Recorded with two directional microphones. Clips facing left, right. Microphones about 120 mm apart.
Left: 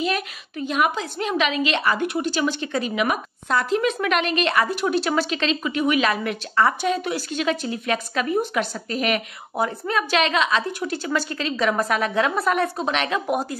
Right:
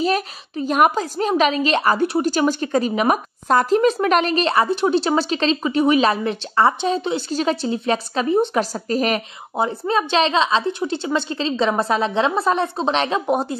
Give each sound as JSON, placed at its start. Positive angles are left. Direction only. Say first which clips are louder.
{"t": 0.0, "sound": "a woman's voice", "louder": "right 4 dB", "side_deg": -35}